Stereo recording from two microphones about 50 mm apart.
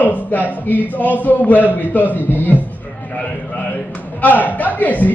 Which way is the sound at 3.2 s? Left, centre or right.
Left.